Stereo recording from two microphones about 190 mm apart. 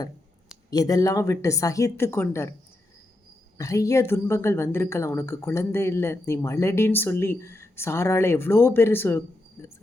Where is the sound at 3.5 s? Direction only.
15° left (ahead or behind).